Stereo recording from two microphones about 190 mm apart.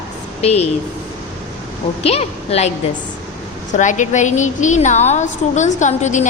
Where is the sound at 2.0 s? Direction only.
30° left (ahead or behind).